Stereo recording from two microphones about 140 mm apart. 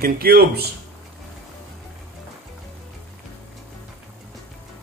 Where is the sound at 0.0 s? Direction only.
90° right.